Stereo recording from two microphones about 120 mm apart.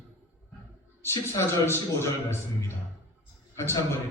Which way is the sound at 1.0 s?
20° left (ahead or behind).